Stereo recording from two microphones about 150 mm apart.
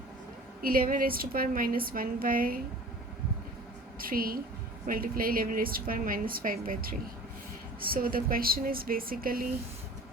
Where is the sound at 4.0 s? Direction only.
75° right (ahead or behind).